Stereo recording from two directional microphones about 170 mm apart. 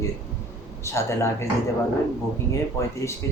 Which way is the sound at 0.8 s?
15° left (ahead or behind).